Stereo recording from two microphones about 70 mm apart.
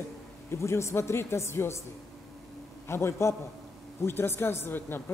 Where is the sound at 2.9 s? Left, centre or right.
Left.